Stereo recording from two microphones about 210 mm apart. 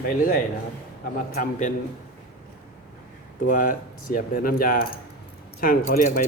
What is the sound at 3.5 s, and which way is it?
A man's voice, 40° left (ahead or behind).